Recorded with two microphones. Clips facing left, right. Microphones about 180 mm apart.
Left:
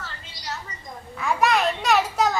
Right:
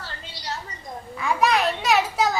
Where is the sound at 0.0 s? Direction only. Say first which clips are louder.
Right 1 dB; 30° right (ahead or behind).